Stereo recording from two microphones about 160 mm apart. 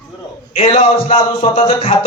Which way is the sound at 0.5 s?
35° left (ahead or behind).